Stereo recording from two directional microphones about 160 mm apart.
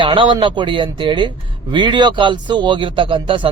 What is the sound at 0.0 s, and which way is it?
Speech, 30° right (ahead or behind).